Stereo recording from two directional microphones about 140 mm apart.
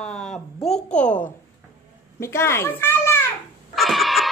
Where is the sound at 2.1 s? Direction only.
20° left (ahead or behind).